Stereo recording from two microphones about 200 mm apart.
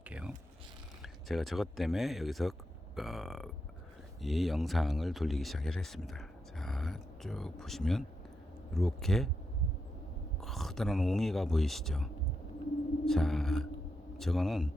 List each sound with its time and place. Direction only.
0.0 s a sound: 5° right (ahead or behind)
1.0 s speech: centre (ahead or behind)
10.4 s speech: centre (ahead or behind)
13.1 s speech: centre (ahead or behind)